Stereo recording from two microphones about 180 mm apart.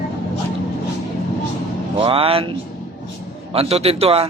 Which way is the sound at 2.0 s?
30° right (ahead or behind).